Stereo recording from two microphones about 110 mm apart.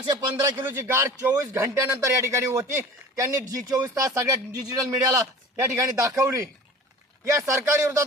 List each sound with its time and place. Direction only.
0.3 s a man's voice: 25° right (ahead or behind)